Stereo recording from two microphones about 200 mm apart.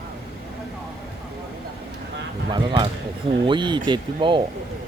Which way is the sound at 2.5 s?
20° right (ahead or behind).